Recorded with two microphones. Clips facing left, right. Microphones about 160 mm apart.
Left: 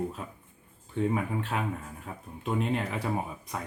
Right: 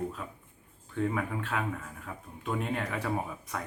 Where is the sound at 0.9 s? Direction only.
25° left (ahead or behind).